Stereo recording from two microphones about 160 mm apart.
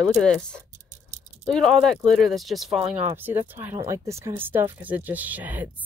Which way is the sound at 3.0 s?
15° right (ahead or behind).